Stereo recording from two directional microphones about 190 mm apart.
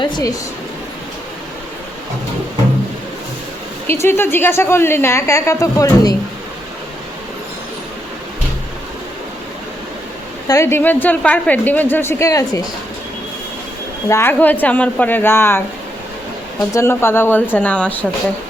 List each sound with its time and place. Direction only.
0.0 s speech: 20° left (ahead or behind)
3.8 s a woman's voice: 15° left (ahead or behind)
10.5 s a woman's voice: 15° left (ahead or behind)
14.1 s a woman's voice: 10° left (ahead or behind)
16.7 s a woman's voice: 15° left (ahead or behind)